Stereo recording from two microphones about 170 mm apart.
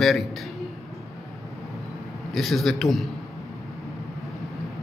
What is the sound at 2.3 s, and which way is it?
Speech, centre (ahead or behind).